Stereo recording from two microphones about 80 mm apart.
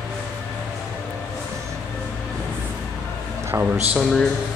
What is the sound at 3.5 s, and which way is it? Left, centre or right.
Speech, right.